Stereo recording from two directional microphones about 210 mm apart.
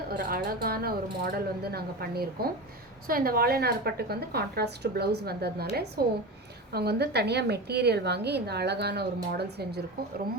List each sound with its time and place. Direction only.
0.1 s a woman's voice: 45° right (ahead or behind)